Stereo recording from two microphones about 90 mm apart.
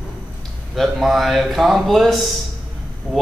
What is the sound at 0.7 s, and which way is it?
Speech, centre (ahead or behind).